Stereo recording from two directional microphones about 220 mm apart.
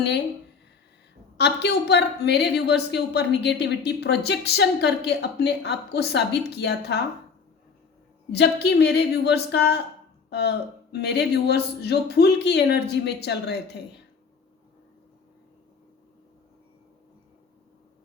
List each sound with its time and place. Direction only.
1.4 s a woman's voice: 50° left (ahead or behind)
8.3 s a woman's voice: 50° left (ahead or behind)